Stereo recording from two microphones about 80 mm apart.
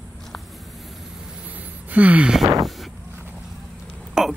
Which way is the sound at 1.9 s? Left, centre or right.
Centre.